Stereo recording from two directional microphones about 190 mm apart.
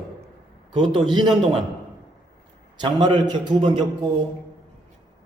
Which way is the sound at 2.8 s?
25° right (ahead or behind).